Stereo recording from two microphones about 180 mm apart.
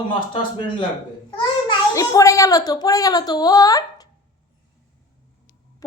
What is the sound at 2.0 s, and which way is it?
A woman's voice, 15° left (ahead or behind).